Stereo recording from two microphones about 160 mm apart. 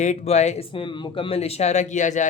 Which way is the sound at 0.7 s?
30° left (ahead or behind).